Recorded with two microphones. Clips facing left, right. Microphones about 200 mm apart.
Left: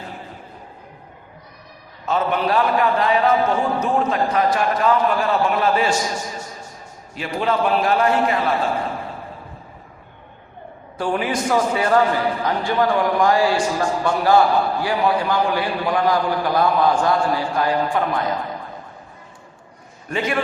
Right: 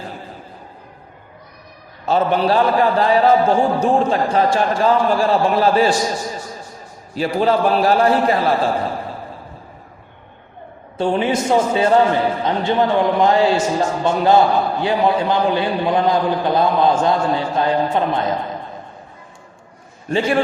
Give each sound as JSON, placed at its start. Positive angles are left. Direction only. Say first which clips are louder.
{"t": 2.0, "sound": "a man's voice", "louder": "right 4 dB", "side_deg": -30}
{"t": 7.1, "sound": "a man's voice", "louder": "right 5 dB", "side_deg": -35}
{"t": 10.9, "sound": "a man's voice", "louder": "right 4 dB", "side_deg": -25}
{"t": 20.1, "sound": "a man's voice", "louder": "right 5 dB", "side_deg": -30}